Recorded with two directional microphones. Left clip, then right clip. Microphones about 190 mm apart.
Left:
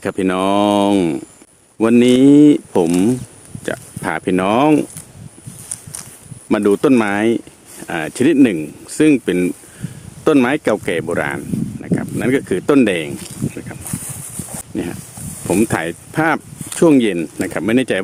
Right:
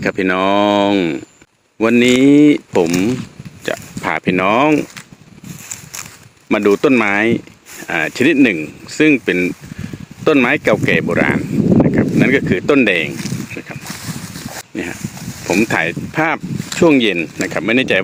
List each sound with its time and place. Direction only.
0.0 s speech: 25° left (ahead or behind)
5.6 s a sound: 45° right (ahead or behind)
6.5 s speech: 20° left (ahead or behind)
15.4 s speech: 30° left (ahead or behind)